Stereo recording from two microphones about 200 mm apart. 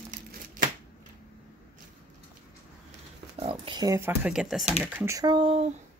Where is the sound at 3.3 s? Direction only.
25° right (ahead or behind); by 4.6 s centre (ahead or behind).